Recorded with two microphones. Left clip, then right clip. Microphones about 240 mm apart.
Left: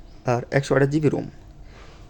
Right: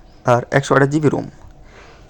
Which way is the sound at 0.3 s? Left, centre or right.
Centre.